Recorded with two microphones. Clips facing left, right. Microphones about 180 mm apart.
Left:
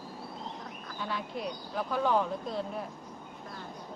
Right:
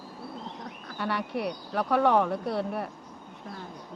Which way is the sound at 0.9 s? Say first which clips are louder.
Right 6 dB; 70° right (ahead or behind).